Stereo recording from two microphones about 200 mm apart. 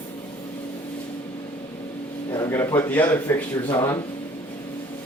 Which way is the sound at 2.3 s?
15° left (ahead or behind).